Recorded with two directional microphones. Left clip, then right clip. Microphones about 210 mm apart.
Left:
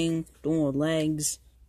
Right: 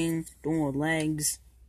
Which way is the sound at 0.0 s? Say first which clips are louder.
Left 2 dB; 15° left (ahead or behind).